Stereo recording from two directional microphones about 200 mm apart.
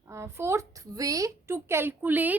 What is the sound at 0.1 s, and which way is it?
A woman's voice, 15° right (ahead or behind).